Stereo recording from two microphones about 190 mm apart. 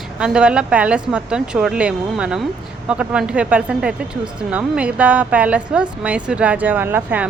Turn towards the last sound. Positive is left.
turn(degrees=-10)  # may be behind; listen again after turning